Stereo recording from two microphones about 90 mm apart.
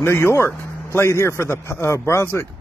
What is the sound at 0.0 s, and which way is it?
A man's voice, 30° left (ahead or behind).